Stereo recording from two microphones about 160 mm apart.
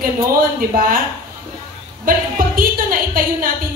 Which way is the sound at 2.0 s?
60° right (ahead or behind).